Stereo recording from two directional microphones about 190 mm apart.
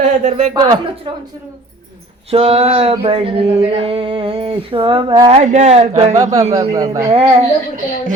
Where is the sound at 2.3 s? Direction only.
30° right (ahead or behind).